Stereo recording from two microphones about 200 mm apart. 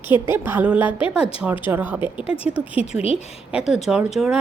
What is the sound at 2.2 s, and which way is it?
Speech, 30° left (ahead or behind).